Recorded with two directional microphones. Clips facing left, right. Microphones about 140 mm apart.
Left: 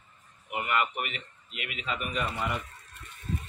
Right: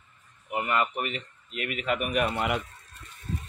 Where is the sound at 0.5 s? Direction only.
35° right (ahead or behind); by 2.6 s 80° right.